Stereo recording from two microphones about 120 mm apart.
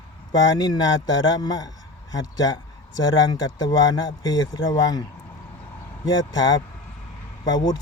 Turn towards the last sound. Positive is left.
turn(degrees=35)  # may be behind; listen again after turning